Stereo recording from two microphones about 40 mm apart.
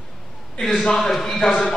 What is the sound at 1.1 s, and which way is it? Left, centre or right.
Speech, centre.